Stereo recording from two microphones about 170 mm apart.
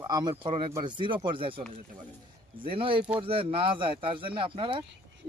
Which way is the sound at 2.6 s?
30° right (ahead or behind).